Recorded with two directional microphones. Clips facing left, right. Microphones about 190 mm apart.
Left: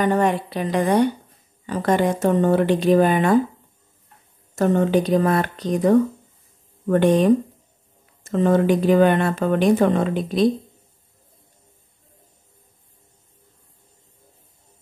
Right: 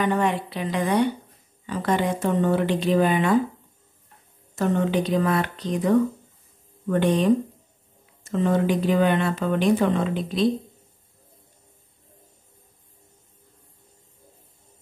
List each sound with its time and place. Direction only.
0.0 s speech: 45° left (ahead or behind)
4.6 s speech: 45° left (ahead or behind)